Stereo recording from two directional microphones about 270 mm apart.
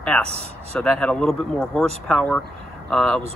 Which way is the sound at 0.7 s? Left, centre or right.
Centre.